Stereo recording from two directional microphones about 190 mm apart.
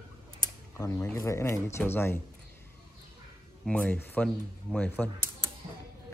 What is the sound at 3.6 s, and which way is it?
Speech, 5° left (ahead or behind).